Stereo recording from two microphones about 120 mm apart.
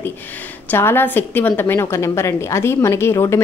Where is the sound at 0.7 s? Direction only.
20° left (ahead or behind).